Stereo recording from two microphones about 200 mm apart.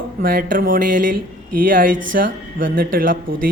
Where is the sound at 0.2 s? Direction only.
45° right (ahead or behind).